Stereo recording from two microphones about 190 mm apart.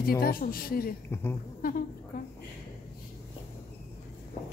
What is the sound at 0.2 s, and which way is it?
Speech, 50° left (ahead or behind).